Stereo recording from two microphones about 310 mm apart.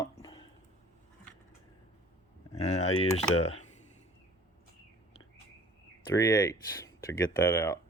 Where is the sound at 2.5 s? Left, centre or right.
Left.